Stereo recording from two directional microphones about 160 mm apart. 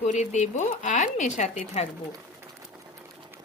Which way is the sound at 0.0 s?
45° left (ahead or behind).